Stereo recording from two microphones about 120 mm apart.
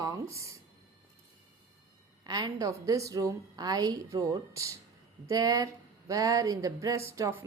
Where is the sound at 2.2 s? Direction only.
35° right (ahead or behind).